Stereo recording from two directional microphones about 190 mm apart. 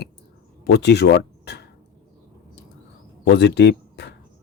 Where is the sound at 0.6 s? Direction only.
60° left (ahead or behind).